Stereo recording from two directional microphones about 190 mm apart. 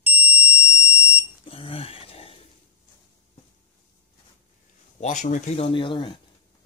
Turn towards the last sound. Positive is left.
turn(degrees=25)  # may be behind; listen again after turning